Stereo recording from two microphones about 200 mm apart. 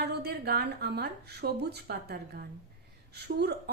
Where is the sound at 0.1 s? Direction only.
55° right (ahead or behind).